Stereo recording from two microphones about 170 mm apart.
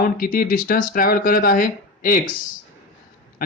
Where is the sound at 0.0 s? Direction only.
55° left (ahead or behind).